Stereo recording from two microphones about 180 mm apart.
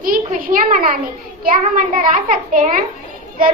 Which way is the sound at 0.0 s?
50° right (ahead or behind).